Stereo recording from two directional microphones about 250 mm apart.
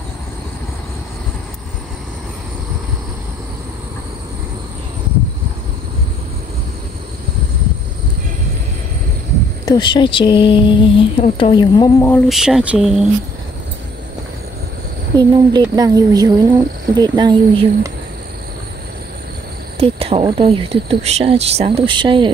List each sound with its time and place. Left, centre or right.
9.7 s speech: centre
12.1 s speech: centre
15.1 s speech: centre
19.8 s speech: right